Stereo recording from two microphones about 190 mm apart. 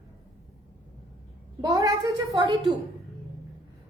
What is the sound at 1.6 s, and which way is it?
Speech, 20° right (ahead or behind).